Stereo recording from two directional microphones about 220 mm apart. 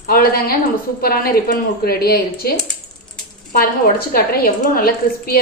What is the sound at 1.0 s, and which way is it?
A woman's voice, 45° left (ahead or behind).